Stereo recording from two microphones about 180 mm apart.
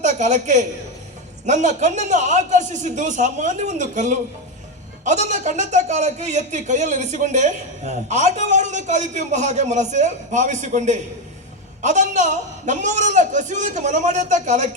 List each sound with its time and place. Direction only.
0.0 s a man's voice: 40° right (ahead or behind)